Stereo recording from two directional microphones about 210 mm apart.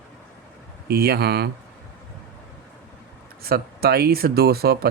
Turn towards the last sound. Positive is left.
turn(degrees=-50)  # may be behind; listen again after turning